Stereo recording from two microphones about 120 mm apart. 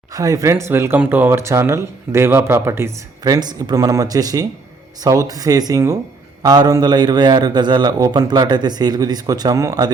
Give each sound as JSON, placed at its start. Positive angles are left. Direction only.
{"t": 0.1, "sound": "speech", "side_deg": -30}
{"t": 3.2, "sound": "a man's voice", "side_deg": -35}